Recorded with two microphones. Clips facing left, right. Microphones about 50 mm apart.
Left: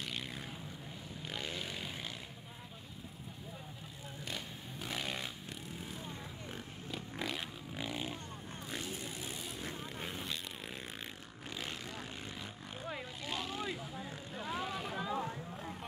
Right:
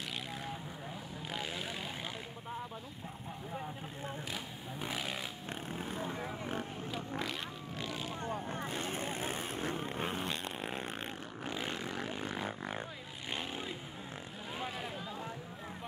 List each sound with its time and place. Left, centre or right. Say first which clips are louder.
1.3 s vehicle: right 2 dB; centre
4.9 s a sound: left 1 dB; centre
5.5 s a sound: right 5 dB; right
6.0 s vehicle: right 7 dB; right
6.9 s vehicle: left 1 dB; centre
7.7 s vehicle: left 1 dB; centre
8.3 s vehicle: right 7 dB; right
12.2 s music: right 8 dB; right
13.3 s vehicle: even; right
14.5 s boat: left 1 dB; centre
15.0 s a sound: left 6 dB; left